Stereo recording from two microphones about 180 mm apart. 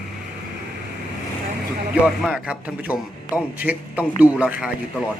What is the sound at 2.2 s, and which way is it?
A man's voice, 5° right (ahead or behind).